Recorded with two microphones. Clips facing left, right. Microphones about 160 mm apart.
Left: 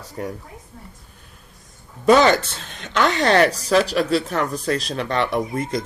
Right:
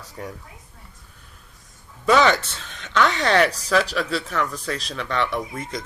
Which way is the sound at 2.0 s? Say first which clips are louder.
Left 3 dB; 40° left (ahead or behind).